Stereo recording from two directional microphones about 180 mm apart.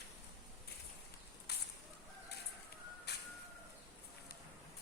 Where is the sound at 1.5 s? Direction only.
65° left (ahead or behind).